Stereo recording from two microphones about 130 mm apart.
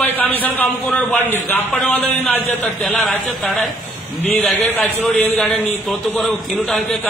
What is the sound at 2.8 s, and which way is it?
Speech, centre (ahead or behind).